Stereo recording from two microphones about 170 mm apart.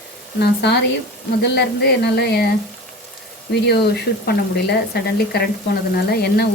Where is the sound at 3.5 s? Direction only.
75° left (ahead or behind).